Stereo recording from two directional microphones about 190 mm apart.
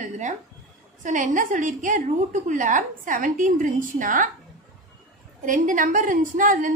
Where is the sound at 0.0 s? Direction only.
40° right (ahead or behind).